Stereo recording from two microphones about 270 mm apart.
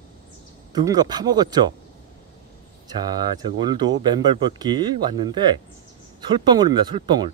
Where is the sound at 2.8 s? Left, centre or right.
Centre.